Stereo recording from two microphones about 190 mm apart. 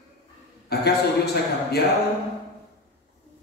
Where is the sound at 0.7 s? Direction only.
55° left (ahead or behind).